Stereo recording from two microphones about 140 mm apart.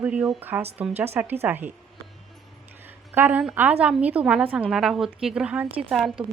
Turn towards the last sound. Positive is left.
turn(degrees=-5)  # may be behind; listen again after turning